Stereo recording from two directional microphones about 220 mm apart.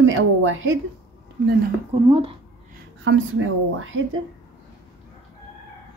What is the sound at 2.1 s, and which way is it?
Speech, 25° right (ahead or behind).